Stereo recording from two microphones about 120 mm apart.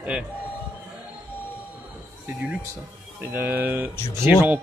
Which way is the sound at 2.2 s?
10° right (ahead or behind).